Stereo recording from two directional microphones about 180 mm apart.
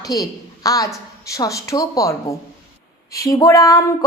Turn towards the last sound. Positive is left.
turn(degrees=20)  # may be behind; listen again after turning